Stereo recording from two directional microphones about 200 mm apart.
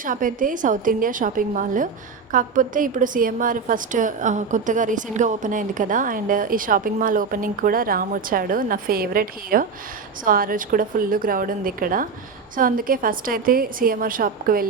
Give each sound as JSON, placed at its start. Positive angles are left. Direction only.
{"t": 0.0, "sound": "a woman's voice", "side_deg": -40}